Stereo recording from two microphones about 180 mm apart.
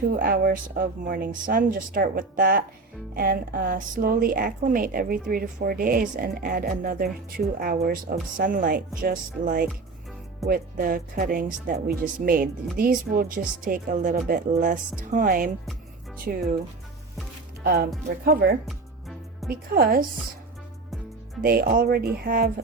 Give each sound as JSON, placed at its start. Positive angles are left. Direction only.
{"t": 0.2, "sound": "speech", "side_deg": -55}
{"t": 17.6, "sound": "speech", "side_deg": -55}
{"t": 21.4, "sound": "speech", "side_deg": -55}